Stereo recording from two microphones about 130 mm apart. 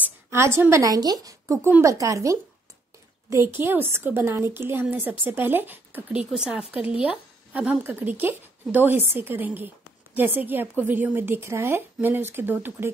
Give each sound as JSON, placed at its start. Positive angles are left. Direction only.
{"t": 0.0, "sound": "a woman's voice", "side_deg": -20}